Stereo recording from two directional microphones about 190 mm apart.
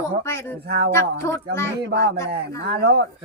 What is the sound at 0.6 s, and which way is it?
Speech, 60° right (ahead or behind).